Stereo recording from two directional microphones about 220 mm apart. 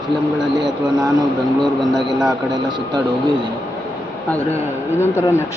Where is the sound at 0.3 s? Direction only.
Centre (ahead or behind).